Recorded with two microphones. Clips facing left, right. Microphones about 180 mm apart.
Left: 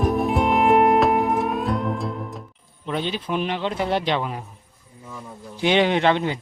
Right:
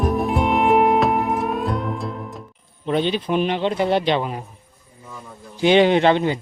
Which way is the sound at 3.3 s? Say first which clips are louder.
Right 4 dB; 20° right (ahead or behind).